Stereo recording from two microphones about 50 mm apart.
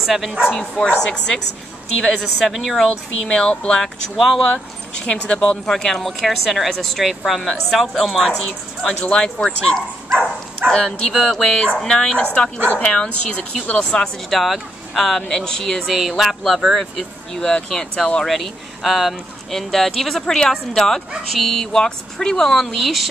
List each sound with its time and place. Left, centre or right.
0.0 s speech: centre
0.6 s speech: left
2.0 s speech: centre
3.3 s speech: centre
9.0 s speech: centre
11.1 s speech: centre
11.4 s speech: left
14.3 s speech: centre
15.9 s speech: centre
18.3 s speech: centre